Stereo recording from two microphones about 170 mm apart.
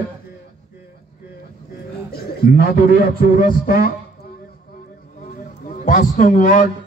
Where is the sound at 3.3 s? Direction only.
55° left (ahead or behind).